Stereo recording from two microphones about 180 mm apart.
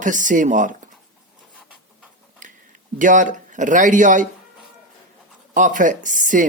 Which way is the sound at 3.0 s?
45° right (ahead or behind).